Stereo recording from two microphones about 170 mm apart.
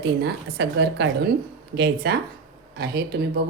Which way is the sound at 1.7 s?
75° right (ahead or behind).